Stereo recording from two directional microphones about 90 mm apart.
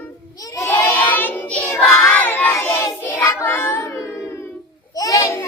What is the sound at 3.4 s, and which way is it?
Child singing, 30° left (ahead or behind).